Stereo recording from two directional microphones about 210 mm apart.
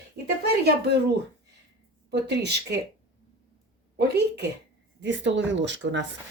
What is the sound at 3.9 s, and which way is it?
Speech, 50° right (ahead or behind).